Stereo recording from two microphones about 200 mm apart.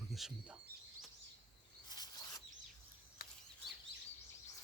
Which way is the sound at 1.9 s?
20° left (ahead or behind).